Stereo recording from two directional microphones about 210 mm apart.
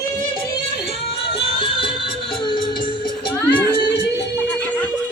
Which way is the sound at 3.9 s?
55° left (ahead or behind).